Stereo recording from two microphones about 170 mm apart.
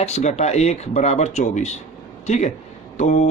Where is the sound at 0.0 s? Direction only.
40° left (ahead or behind).